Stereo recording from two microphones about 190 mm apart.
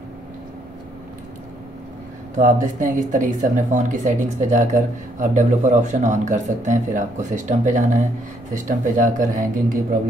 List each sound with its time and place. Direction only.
2.3 s speech: 45° right (ahead or behind)